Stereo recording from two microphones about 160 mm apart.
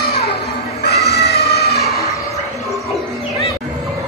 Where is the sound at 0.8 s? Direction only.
90° left.